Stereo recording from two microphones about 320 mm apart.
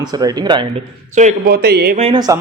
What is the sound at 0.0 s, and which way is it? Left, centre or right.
Speech, centre.